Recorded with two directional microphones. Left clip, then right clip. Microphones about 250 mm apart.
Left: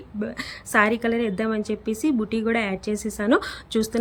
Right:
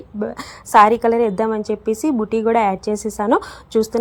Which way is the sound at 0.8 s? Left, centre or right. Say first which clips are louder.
Right 9 dB; centre.